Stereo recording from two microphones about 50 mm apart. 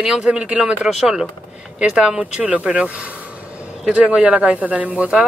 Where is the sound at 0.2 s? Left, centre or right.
Right.